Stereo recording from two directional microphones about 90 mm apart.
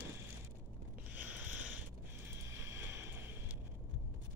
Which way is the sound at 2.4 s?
30° right (ahead or behind).